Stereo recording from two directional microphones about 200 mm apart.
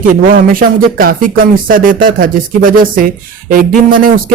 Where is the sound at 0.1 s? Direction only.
45° right (ahead or behind).